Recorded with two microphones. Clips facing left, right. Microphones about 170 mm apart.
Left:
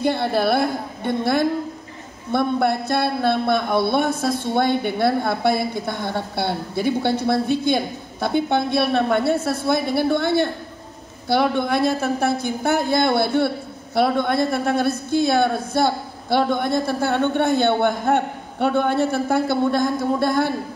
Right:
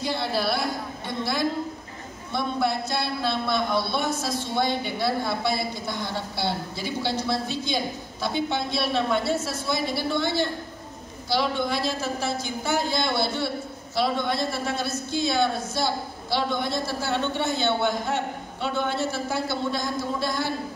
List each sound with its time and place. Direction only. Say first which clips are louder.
0.0 s speech: left 7 dB; 55° left (ahead or behind)